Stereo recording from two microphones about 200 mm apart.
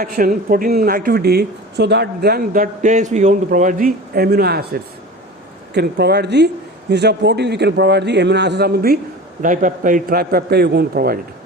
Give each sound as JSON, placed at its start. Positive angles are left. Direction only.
{"t": 0.0, "sound": "a man's voice", "side_deg": -45}